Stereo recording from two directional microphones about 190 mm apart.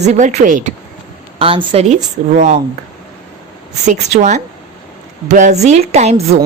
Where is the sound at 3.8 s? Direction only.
35° right (ahead or behind).